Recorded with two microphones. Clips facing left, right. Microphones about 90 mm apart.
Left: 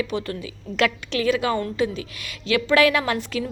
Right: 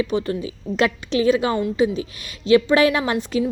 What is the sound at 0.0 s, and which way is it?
A woman's voice, 20° right (ahead or behind).